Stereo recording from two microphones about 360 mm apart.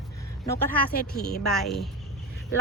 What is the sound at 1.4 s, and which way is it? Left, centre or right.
Speech, centre.